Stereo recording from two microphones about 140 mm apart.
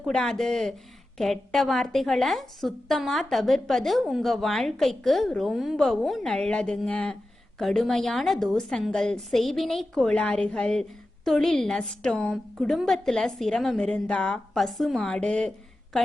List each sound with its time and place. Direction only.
0.0 s a woman's voice: 5° left (ahead or behind)